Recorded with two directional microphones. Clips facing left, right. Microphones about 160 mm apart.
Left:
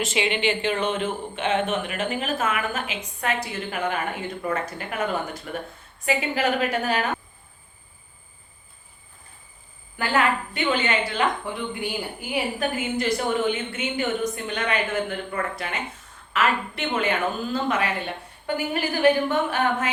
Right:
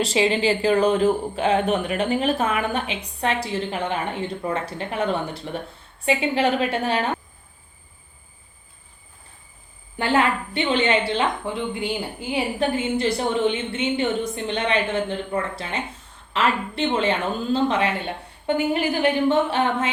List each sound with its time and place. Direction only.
0.0 s a woman's voice: 35° right (ahead or behind)
10.0 s a woman's voice: 30° right (ahead or behind)